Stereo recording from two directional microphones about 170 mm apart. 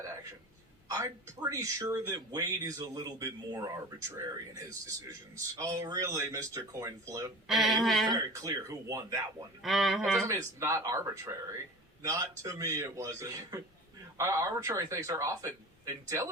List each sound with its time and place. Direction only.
0.0 s a sound: 20° right (ahead or behind)
0.9 s speech: 20° right (ahead or behind)
7.4 s speech: centre (ahead or behind)
8.1 s speech: 20° right (ahead or behind)
9.6 s speech: centre (ahead or behind)
10.2 s a man's voice: 15° right (ahead or behind)